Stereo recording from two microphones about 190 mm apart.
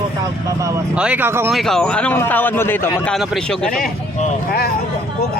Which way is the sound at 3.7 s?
50° left (ahead or behind).